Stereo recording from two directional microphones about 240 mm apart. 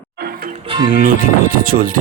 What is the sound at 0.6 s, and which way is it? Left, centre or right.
Music, centre.